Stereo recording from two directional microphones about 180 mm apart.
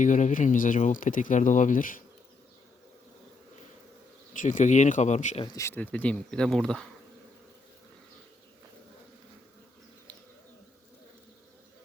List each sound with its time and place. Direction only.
0.0 s speech: 45° left (ahead or behind)
4.4 s speech: 45° left (ahead or behind)
5.5 s speech: 15° left (ahead or behind)